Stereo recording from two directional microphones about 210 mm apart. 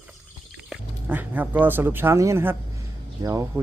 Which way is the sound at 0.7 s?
10° right (ahead or behind).